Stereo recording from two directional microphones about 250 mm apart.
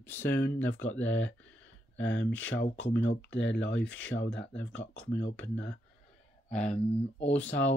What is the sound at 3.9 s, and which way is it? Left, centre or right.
Speech, centre.